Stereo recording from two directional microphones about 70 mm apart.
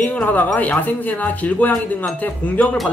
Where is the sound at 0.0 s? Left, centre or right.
Centre.